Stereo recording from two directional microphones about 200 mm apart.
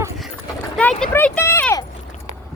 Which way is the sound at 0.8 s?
5° left (ahead or behind).